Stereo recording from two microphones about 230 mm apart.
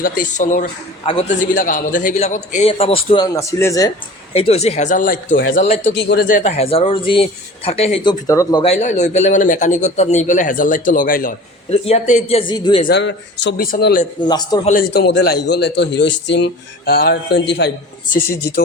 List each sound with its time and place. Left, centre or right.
0.0 s a man's voice: left; by 3.9 s centre
4.4 s a man's voice: left
5.3 s speech: left
5.6 s a man's voice: left
5.9 s a man's voice: left; by 8.7 s centre
8.7 s a man's voice: left
11.7 s a man's voice: left
12.8 s speech: left
14.0 s a man's voice: centre
14.7 s speech: left